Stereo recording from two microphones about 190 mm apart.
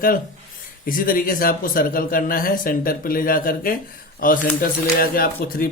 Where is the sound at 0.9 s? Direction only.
45° left (ahead or behind).